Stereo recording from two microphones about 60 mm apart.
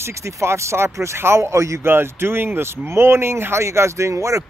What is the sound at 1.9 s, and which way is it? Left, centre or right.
A man's voice, right.